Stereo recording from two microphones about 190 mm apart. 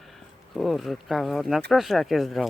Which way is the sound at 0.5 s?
Centre (ahead or behind).